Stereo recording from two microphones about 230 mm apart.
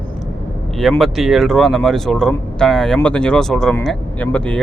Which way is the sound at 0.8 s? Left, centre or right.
Centre.